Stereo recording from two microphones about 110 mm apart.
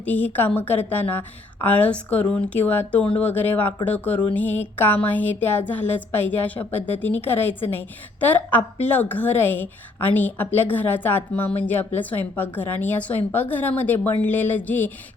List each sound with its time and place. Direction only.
0.0 s speech: 15° left (ahead or behind)